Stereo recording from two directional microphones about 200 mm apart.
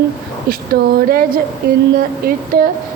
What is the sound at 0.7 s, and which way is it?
Speech, 50° right (ahead or behind).